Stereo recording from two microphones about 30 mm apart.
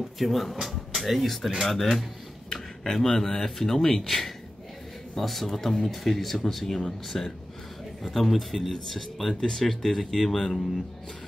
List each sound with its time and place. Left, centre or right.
0.0 s speech: centre
2.5 s speech: centre